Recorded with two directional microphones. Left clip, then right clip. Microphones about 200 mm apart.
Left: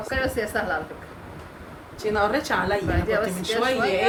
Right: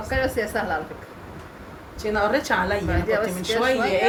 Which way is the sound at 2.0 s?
10° left (ahead or behind).